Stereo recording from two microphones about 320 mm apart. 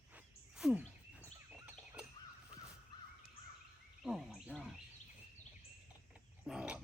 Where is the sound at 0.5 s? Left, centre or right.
Centre.